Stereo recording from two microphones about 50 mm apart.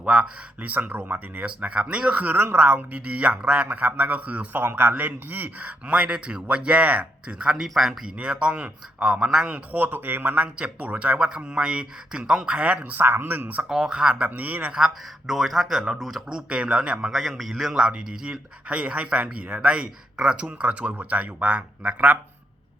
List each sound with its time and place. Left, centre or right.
0.0 s a man's voice: right
2.7 s a man's voice: right
4.6 s a man's voice: right; by 7.6 s centre
7.7 s speech: centre
8.2 s a man's voice: right
9.7 s a man's voice: right; by 12.5 s centre
12.5 s a man's voice: right
12.8 s speech: right
13.7 s a man's voice: centre; by 14.7 s right
14.7 s speech: centre
16.5 s speech: centre
17.1 s speech: centre
18.3 s a man's voice: right